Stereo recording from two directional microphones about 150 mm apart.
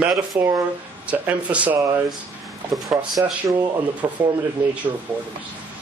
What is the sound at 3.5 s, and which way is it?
Speech, 25° right (ahead or behind).